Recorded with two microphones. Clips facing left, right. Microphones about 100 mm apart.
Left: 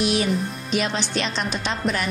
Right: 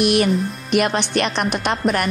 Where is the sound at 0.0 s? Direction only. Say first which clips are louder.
Right 5 dB; 65° right (ahead or behind).